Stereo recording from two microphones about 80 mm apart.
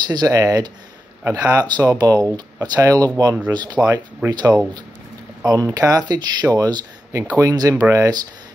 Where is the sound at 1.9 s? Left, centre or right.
Right.